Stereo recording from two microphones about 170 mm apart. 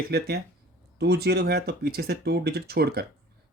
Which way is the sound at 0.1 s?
70° right (ahead or behind).